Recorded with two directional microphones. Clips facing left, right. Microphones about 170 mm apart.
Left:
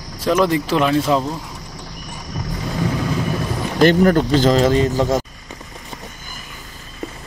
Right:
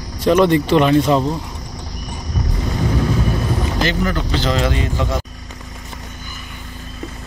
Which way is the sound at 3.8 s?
50° left (ahead or behind).